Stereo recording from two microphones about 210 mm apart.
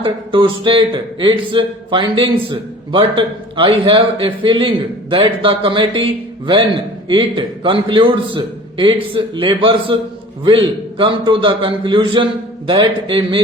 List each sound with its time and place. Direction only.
0.0 s speech: 25° right (ahead or behind)
7.1 s speech: 25° right (ahead or behind)